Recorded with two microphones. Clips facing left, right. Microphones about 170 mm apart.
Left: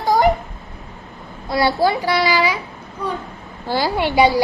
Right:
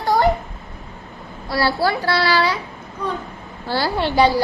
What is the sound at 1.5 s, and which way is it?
A child's voice, 20° left (ahead or behind).